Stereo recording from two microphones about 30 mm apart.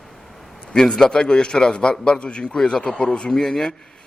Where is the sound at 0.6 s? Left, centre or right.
Left.